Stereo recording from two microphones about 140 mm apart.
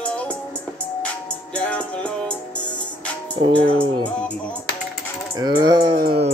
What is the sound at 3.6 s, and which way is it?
Speech, 40° right (ahead or behind).